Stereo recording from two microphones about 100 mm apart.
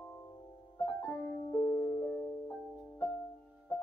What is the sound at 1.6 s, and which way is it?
Music, 40° left (ahead or behind).